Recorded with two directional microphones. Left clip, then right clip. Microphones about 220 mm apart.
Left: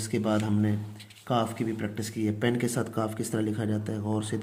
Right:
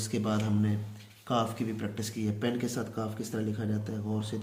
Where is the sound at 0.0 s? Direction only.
30° left (ahead or behind).